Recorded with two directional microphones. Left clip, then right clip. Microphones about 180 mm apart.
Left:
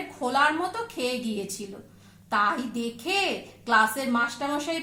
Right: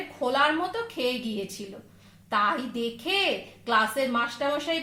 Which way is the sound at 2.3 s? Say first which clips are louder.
Left 1 dB; 45° right (ahead or behind).